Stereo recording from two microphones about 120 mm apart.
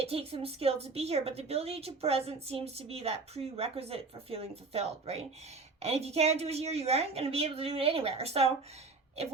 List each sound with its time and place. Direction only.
0.0 s a woman's voice: 55° right (ahead or behind)